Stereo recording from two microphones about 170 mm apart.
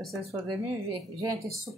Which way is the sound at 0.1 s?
20° right (ahead or behind).